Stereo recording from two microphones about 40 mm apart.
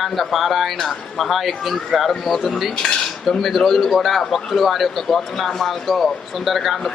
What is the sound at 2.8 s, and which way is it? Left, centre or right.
Cutlery, left.